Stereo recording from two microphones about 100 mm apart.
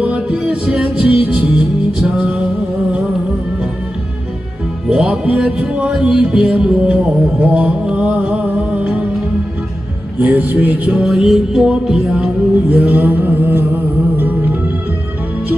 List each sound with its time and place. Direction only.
0.0 s music: 15° right (ahead or behind)
4.8 s music: 5° right (ahead or behind)
10.1 s music: 15° right (ahead or behind)
11.1 s music: centre (ahead or behind); by 14.6 s 20° right (ahead or behind)